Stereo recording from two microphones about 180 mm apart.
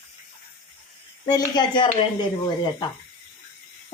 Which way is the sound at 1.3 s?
25° left (ahead or behind).